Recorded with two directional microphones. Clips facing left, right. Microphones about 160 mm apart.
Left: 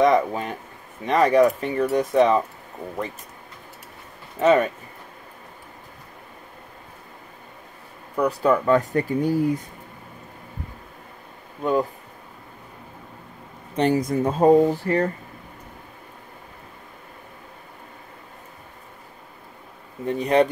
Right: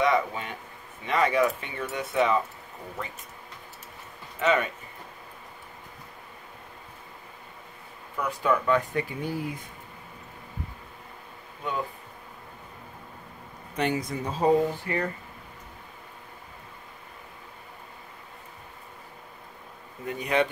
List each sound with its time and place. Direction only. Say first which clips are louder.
0.0 s speech: left 6 dB; 40° left (ahead or behind)
4.4 s speech: left 7 dB; 40° left (ahead or behind)
8.2 s speech: left 6 dB; 40° left (ahead or behind)
13.7 s speech: left 8 dB; 40° left (ahead or behind)
20.1 s speech: left 7 dB; 35° left (ahead or behind)